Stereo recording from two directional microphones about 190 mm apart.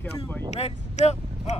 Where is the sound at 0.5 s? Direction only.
35° left (ahead or behind).